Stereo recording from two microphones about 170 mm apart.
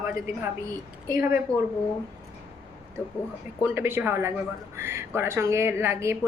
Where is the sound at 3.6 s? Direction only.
15° right (ahead or behind).